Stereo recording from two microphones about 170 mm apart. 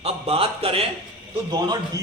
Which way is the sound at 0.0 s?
35° right (ahead or behind).